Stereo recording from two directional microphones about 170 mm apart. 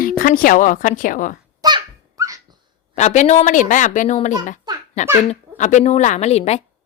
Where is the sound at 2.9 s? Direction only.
45° left (ahead or behind).